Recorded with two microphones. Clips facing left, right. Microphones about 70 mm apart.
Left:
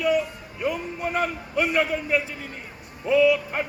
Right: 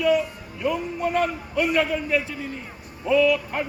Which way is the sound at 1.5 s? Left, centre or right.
Left.